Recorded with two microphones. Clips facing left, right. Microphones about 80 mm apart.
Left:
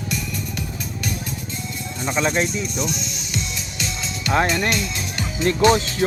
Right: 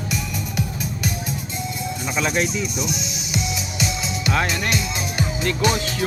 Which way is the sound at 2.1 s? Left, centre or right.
Centre.